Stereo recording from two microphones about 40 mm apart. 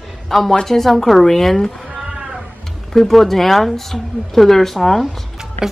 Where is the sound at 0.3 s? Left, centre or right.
Centre.